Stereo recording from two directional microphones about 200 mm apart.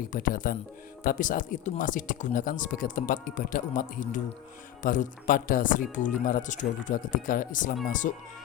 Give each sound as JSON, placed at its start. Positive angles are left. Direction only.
{"t": 0.1, "sound": "speech", "side_deg": 40}